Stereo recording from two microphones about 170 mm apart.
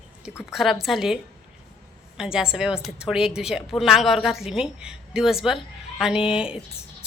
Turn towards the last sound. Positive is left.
turn(degrees=-5)  # may be behind; listen again after turning